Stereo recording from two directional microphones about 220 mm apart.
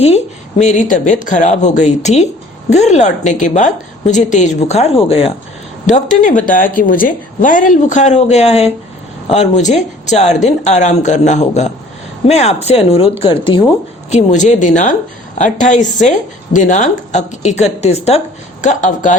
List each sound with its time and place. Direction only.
0.6 s a woman's voice: 35° left (ahead or behind)
14.1 s a woman's voice: 35° left (ahead or behind)